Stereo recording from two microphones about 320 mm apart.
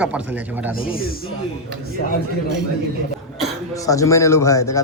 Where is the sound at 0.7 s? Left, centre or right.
Left.